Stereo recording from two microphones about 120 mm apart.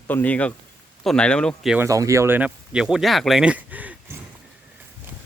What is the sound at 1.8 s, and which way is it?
Speech, 25° right (ahead or behind).